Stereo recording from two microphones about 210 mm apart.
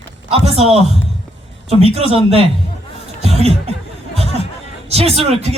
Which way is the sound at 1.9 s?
30° right (ahead or behind).